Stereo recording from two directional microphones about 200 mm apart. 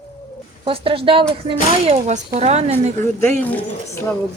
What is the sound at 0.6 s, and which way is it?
A woman's voice, 25° right (ahead or behind).